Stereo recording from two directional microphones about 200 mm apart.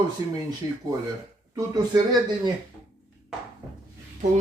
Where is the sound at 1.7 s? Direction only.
20° right (ahead or behind).